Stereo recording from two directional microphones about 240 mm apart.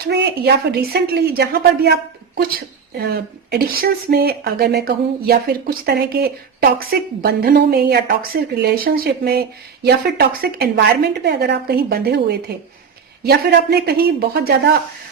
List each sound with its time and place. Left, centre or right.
0.1 s speech: right